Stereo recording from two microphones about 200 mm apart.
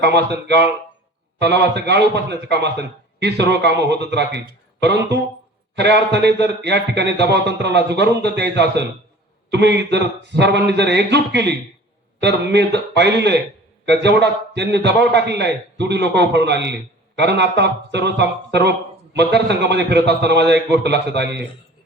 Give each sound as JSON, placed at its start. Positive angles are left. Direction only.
{"t": 0.0, "sound": "speech", "side_deg": -55}